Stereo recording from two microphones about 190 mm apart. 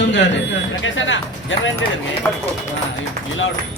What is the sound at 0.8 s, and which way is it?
Speech, 90° left.